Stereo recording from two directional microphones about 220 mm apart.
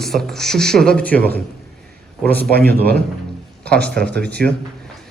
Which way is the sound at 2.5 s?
45° right (ahead or behind).